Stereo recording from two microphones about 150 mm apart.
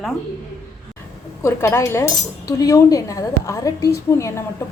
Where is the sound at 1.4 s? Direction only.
15° left (ahead or behind).